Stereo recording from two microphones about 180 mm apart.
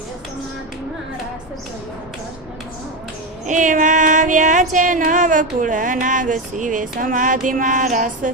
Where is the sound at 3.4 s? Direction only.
45° right (ahead or behind).